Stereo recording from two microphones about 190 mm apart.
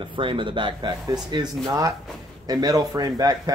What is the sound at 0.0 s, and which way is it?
Speech, 25° right (ahead or behind).